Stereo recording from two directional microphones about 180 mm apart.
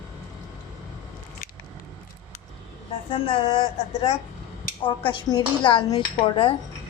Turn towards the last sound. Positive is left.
turn(degrees=30)  # may be behind; listen again after turning